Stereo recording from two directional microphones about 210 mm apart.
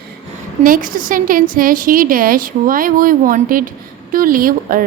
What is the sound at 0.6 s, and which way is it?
A woman's voice, 40° right (ahead or behind).